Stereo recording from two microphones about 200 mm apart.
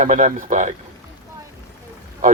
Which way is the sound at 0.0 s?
40° right (ahead or behind).